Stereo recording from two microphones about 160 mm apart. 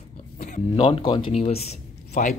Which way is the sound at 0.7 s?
35° left (ahead or behind).